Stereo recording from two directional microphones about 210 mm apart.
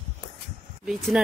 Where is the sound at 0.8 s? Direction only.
Centre (ahead or behind).